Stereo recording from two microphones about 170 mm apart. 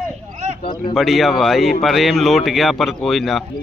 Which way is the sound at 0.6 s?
30° left (ahead or behind).